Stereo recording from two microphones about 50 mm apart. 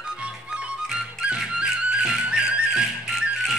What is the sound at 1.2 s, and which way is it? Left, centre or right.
Music, centre.